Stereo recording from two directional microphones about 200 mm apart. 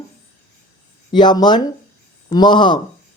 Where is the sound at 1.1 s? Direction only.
20° left (ahead or behind).